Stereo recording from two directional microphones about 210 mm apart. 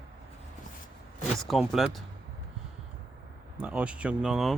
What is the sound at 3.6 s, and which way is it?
Speech, 5° right (ahead or behind).